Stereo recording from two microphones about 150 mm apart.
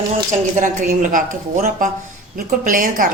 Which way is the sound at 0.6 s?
60° right (ahead or behind).